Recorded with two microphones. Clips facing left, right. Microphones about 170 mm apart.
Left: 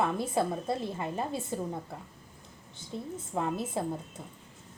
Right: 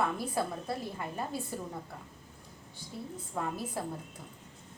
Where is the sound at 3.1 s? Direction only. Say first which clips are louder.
Left 4 dB; 25° left (ahead or behind).